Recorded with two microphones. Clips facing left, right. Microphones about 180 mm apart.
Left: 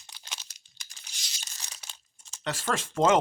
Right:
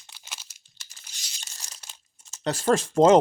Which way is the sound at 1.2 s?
Centre (ahead or behind).